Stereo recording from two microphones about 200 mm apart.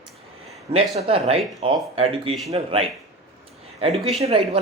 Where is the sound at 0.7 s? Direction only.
30° right (ahead or behind).